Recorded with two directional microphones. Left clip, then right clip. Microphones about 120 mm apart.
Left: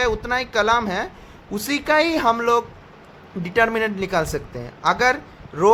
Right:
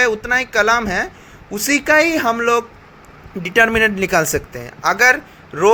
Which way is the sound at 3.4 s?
30° right (ahead or behind).